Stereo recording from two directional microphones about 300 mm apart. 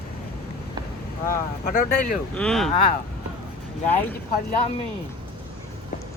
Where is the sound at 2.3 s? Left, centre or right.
Centre.